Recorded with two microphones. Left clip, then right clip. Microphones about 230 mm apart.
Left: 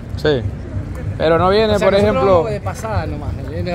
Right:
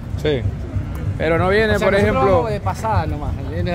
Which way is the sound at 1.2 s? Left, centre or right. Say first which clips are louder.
Left 3 dB; centre.